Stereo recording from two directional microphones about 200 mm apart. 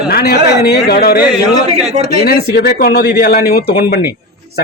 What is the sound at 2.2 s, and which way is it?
A man's voice, 50° left (ahead or behind).